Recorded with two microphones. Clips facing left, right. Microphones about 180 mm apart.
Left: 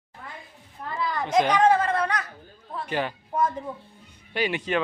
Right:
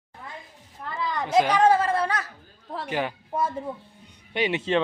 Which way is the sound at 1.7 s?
30° right (ahead or behind).